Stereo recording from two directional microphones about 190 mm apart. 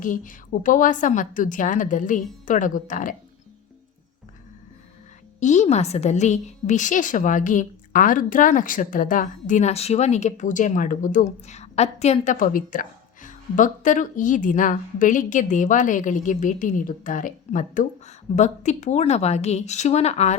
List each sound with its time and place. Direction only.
0.0 s a woman's voice: 45° left (ahead or behind)
5.4 s a woman's voice: 40° left (ahead or behind)